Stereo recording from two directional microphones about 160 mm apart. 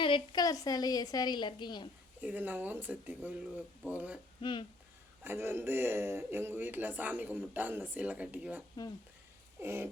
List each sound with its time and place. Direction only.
0.0 s a woman's voice: 30° left (ahead or behind)
2.2 s speech: 10° right (ahead or behind)
4.4 s speech: 30° left (ahead or behind)
5.2 s speech: 15° right (ahead or behind)